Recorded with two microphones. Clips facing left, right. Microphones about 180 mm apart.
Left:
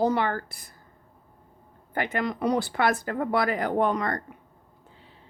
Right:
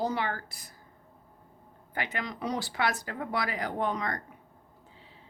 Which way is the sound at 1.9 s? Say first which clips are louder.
Left 7 dB; 50° left (ahead or behind).